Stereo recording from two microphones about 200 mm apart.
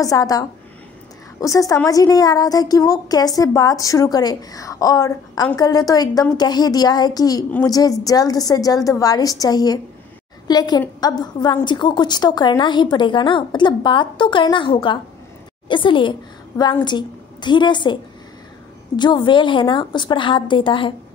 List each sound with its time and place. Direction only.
0.0 s a woman's voice: 15° left (ahead or behind)
18.9 s a woman's voice: 25° left (ahead or behind)